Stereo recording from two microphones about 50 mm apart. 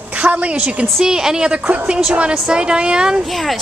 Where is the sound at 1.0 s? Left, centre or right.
Centre.